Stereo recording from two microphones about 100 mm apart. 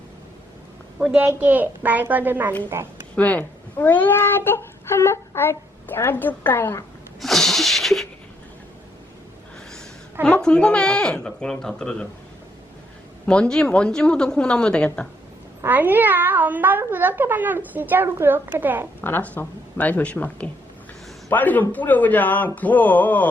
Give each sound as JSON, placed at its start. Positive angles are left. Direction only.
{"t": 1.1, "sound": "a child's voice", "side_deg": -15}
{"t": 3.2, "sound": "speech", "side_deg": 15}
{"t": 7.2, "sound": "a sound", "side_deg": 5}
{"t": 10.2, "sound": "speech", "side_deg": 10}
{"t": 13.2, "sound": "speech", "side_deg": 10}
{"t": 15.6, "sound": "a child's voice", "side_deg": -20}
{"t": 19.0, "sound": "speech", "side_deg": 15}